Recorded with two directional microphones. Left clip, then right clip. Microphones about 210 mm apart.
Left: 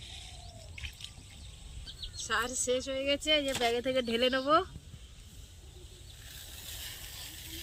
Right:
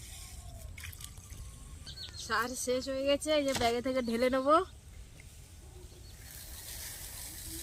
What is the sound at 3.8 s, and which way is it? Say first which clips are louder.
Speech: left 2 dB; 20° right (ahead or behind).